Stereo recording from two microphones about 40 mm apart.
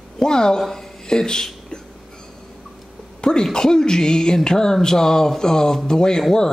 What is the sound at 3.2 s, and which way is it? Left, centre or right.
Speech, centre.